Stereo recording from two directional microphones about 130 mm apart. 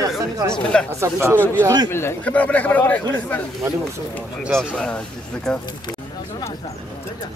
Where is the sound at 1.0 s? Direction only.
20° right (ahead or behind).